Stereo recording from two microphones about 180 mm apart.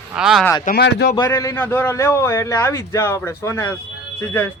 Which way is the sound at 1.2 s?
15° left (ahead or behind).